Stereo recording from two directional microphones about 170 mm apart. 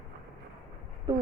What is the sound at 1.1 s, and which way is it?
Speech, 25° right (ahead or behind).